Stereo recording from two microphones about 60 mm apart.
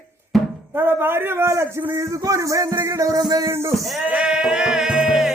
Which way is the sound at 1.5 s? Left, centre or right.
Right.